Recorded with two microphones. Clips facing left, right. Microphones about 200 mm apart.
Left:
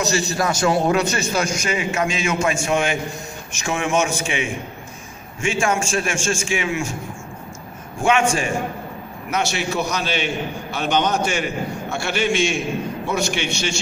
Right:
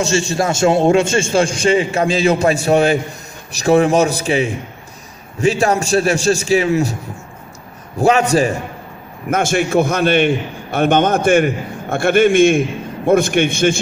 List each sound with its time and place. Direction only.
0.0 s a man's voice: 30° right (ahead or behind)
8.0 s a man's voice: 35° right (ahead or behind)
9.3 s a man's voice: 50° right (ahead or behind)